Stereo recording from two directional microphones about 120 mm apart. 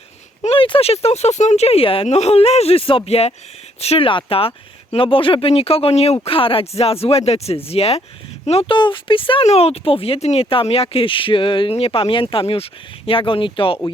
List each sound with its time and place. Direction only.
0.4 s speech: 50° left (ahead or behind)
2.0 s speech: 60° left (ahead or behind)
6.2 s speech: 50° left (ahead or behind)
9.5 s speech: 60° left (ahead or behind)